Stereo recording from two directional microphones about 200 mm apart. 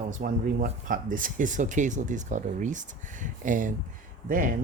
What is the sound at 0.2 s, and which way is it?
Speech, 45° right (ahead or behind).